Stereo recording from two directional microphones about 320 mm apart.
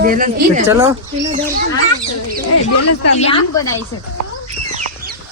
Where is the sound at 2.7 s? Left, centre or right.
Left.